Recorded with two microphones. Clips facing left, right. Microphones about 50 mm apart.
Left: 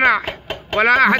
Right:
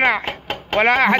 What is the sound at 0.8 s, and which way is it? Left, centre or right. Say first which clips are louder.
Speech: left 2 dB; right.